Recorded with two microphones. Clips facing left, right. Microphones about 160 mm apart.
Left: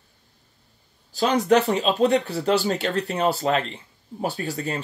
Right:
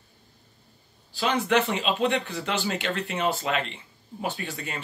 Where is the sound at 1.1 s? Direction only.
40° left (ahead or behind).